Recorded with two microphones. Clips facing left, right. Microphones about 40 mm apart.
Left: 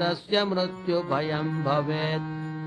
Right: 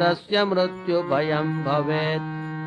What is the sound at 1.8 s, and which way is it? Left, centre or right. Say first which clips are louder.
Music: right 4 dB; right.